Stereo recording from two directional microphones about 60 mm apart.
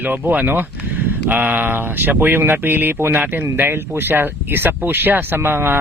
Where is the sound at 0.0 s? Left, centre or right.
Right.